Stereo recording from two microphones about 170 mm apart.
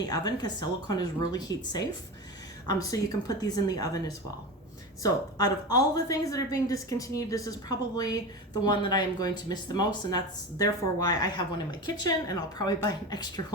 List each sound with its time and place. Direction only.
0.0 s speech: 20° left (ahead or behind)
5.0 s speech: 20° left (ahead or behind)